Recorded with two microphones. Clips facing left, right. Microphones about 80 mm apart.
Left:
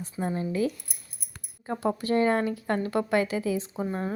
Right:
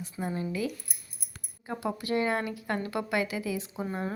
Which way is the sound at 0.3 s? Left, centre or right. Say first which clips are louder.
Left 5 dB; left.